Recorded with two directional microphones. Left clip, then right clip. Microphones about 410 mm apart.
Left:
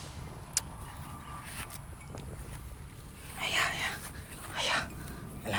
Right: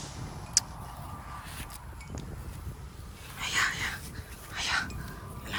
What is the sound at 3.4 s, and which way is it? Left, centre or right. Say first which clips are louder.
Whispering: right 2 dB; centre.